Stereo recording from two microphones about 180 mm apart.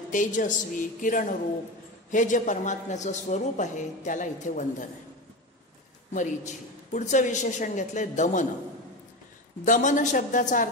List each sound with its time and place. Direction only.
0.1 s a man's voice: 45° left (ahead or behind)
6.1 s a man's voice: 45° left (ahead or behind)
9.7 s a man's voice: 45° left (ahead or behind)